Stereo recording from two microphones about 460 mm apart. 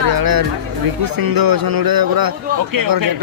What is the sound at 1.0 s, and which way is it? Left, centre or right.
Speech, right.